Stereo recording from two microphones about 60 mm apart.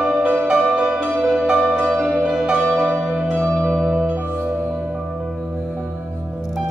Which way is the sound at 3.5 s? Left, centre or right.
Centre.